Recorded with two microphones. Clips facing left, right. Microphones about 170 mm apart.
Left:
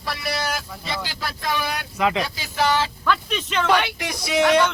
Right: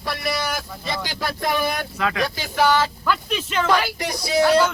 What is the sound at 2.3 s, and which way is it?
Speech, 50° right (ahead or behind).